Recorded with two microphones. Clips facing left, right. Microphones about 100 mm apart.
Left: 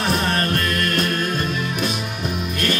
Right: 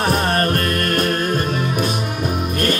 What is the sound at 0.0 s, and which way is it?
Music, 45° right (ahead or behind).